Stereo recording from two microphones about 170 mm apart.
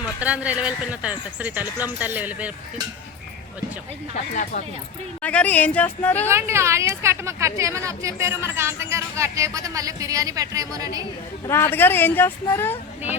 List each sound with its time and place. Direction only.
0.0 s a woman's voice: 5° right (ahead or behind)
4.1 s speech: 55° left (ahead or behind)
5.2 s speech: 10° left (ahead or behind)
6.2 s a woman's voice: 15° right (ahead or behind)
11.4 s speech: 15° left (ahead or behind)